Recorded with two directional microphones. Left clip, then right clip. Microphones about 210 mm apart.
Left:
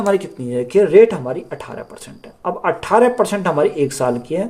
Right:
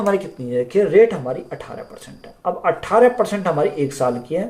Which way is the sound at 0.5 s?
55° left (ahead or behind).